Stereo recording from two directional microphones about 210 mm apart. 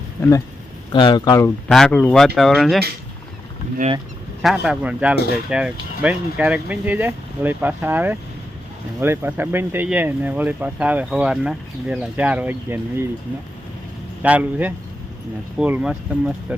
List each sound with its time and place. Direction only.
0.2 s speech: 15° left (ahead or behind)
1.6 s speech: centre (ahead or behind)
4.4 s speech: 5° right (ahead or behind)
14.2 s speech: 5° right (ahead or behind)